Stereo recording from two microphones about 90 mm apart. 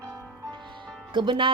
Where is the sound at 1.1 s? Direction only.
65° right (ahead or behind).